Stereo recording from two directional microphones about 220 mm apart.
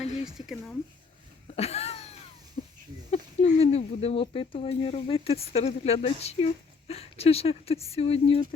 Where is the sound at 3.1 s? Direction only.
30° left (ahead or behind).